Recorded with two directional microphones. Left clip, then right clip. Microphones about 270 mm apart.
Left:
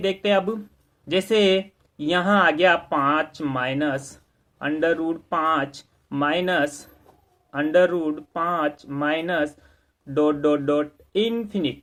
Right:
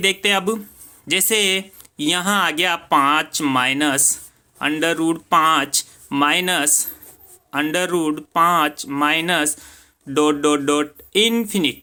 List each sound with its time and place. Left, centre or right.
0.0 s speech: right